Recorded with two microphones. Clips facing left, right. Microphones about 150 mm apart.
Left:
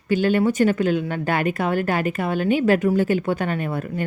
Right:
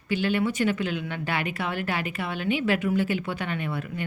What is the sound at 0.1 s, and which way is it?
A woman's voice, 45° left (ahead or behind).